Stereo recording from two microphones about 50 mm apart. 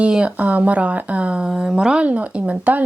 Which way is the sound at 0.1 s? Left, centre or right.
Right.